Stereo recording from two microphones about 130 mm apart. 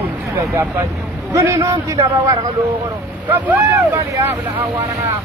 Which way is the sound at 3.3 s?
15° right (ahead or behind).